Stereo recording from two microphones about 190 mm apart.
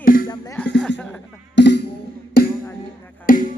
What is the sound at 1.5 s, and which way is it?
Music, 65° left (ahead or behind).